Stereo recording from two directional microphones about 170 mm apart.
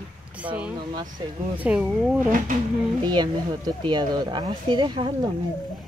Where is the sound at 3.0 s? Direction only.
25° right (ahead or behind).